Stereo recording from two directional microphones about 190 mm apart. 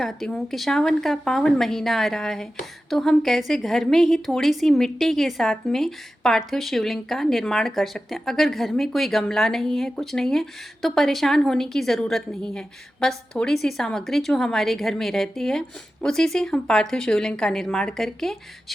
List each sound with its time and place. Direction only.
0.0 s a woman's voice: centre (ahead or behind)